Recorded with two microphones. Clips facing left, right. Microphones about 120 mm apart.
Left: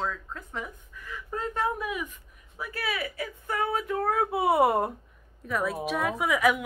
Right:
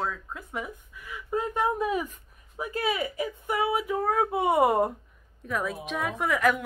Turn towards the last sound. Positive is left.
turn(degrees=5)  # may be behind; listen again after turning